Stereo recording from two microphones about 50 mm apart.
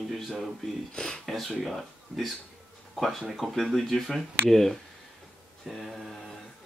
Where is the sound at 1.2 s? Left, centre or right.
Centre.